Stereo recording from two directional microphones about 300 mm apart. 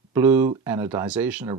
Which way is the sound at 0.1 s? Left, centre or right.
Centre.